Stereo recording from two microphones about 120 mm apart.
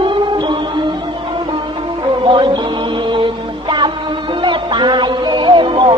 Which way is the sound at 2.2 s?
45° right (ahead or behind).